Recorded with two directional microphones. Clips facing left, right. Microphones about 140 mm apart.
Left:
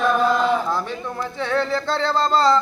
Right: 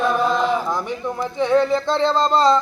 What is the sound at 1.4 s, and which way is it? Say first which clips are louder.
Music: right 5 dB; 15° right (ahead or behind).